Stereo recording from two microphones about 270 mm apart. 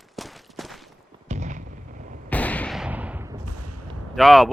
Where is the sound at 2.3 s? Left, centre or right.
Centre.